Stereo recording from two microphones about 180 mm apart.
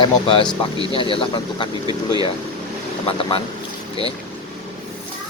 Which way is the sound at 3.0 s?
30° left (ahead or behind).